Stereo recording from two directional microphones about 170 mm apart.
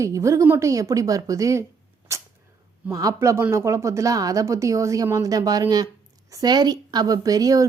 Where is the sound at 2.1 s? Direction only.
15° right (ahead or behind).